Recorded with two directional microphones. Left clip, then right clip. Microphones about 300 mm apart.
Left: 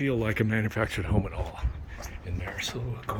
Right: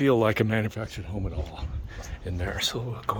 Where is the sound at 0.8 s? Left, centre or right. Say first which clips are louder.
Left 7 dB; centre.